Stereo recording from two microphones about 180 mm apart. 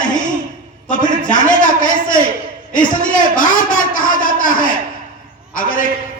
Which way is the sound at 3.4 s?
50° left (ahead or behind).